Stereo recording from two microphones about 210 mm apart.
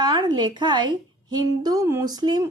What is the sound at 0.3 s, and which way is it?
Speech, 20° right (ahead or behind).